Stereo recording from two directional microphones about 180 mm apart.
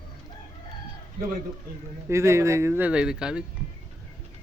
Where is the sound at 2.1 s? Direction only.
15° right (ahead or behind).